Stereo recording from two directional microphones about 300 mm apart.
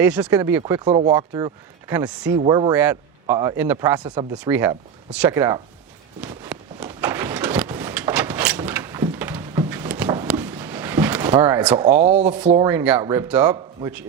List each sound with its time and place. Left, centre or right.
0.0 s speech: centre
2.4 s speech: centre
6.1 s a sound: centre
11.3 s speech: centre
11.9 s speech: right
12.6 s speech: centre